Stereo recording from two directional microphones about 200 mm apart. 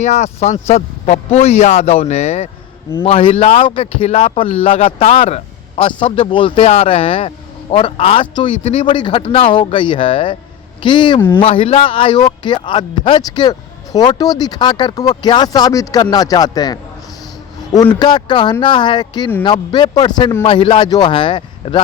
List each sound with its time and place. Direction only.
0.0 s a man's voice: 35° left (ahead or behind)